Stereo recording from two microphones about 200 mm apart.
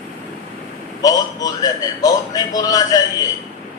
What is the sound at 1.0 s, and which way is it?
A man's voice, 20° left (ahead or behind).